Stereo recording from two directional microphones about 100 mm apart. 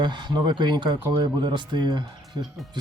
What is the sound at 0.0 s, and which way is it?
Speech, 50° right (ahead or behind).